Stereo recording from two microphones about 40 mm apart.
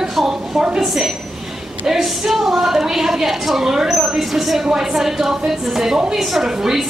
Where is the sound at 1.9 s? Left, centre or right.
Centre.